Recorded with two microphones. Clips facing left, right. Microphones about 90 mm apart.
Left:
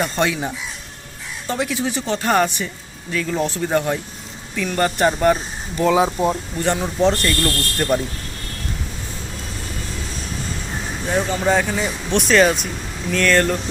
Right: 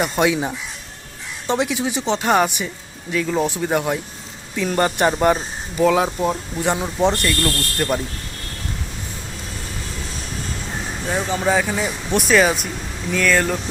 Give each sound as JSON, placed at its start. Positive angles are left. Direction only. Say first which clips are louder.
{"t": 0.0, "sound": "speech", "louder": "right 2 dB", "side_deg": -15}
{"t": 4.5, "sound": "speech", "louder": "right 1 dB", "side_deg": -25}
{"t": 6.0, "sound": "speech", "louder": "left 2 dB", "side_deg": 15}
{"t": 6.6, "sound": "speech", "louder": "even", "side_deg": -15}
{"t": 7.2, "sound": "speech", "louder": "even", "side_deg": 0}
{"t": 11.3, "sound": "speech", "louder": "right 1 dB", "side_deg": -5}